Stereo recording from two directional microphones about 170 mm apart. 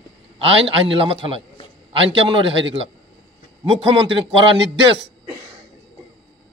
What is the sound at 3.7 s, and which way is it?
Speech, 30° right (ahead or behind).